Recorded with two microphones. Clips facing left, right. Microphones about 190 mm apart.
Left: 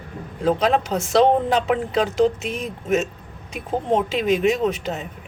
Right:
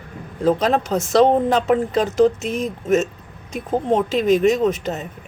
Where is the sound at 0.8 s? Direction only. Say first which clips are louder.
Right 3 dB; 40° right (ahead or behind).